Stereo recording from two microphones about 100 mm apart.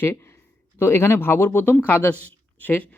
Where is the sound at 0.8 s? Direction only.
25° left (ahead or behind).